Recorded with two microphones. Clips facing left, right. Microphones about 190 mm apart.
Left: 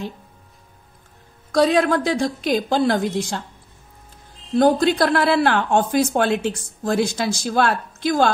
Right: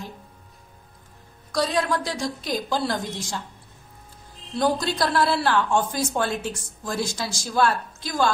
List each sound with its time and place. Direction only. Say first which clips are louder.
1.5 s a woman's voice: left 7 dB; 60° left (ahead or behind)
4.6 s a woman's voice: left 7 dB; 55° left (ahead or behind)